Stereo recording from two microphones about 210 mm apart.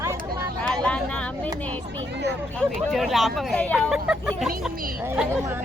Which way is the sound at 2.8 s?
Centre (ahead or behind).